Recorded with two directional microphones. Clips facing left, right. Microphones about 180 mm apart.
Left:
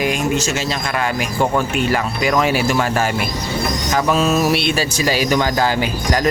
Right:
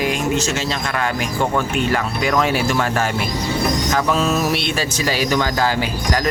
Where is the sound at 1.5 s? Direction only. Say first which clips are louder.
Left 1 dB; 10° left (ahead or behind).